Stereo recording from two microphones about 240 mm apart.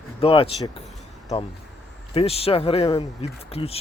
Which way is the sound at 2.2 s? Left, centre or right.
Left.